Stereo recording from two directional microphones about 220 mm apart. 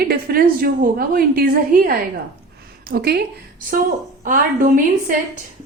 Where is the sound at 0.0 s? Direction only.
45° right (ahead or behind).